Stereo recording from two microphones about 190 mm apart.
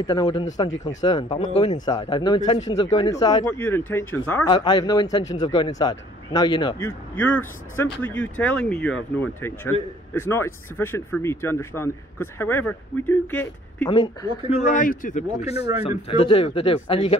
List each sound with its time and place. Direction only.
0.0 s speech: 25° left (ahead or behind)
1.4 s speech: 35° left (ahead or behind)
3.5 s speech: 10° left (ahead or behind)
4.5 s speech: 25° left (ahead or behind)
6.8 s speech: 10° left (ahead or behind)
13.8 s speech: 20° left (ahead or behind)
14.5 s a man's voice: 40° left (ahead or behind)